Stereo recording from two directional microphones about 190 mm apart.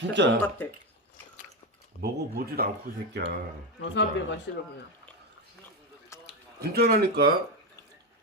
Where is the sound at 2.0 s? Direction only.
55° right (ahead or behind).